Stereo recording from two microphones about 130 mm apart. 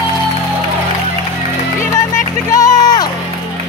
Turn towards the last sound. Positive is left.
turn(degrees=30)  # may be behind; listen again after turning